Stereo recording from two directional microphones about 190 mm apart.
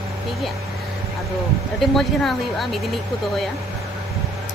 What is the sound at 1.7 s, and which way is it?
Speech, centre (ahead or behind).